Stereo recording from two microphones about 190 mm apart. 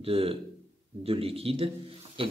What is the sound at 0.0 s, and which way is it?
Speech, 30° right (ahead or behind).